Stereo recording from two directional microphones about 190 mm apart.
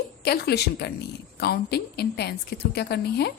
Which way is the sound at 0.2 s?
55° left (ahead or behind).